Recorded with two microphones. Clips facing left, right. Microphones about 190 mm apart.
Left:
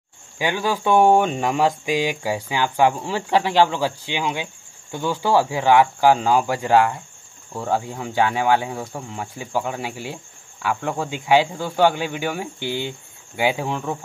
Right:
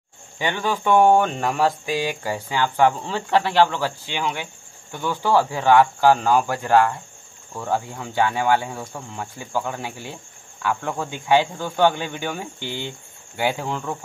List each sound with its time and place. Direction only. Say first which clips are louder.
0.4 s speech: left 2 dB; 10° left (ahead or behind)